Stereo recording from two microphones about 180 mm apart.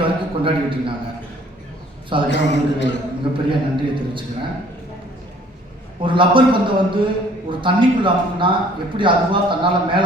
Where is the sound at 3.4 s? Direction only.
25° right (ahead or behind).